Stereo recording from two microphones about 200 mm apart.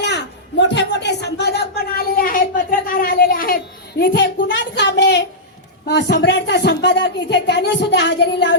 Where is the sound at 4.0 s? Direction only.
60° left (ahead or behind).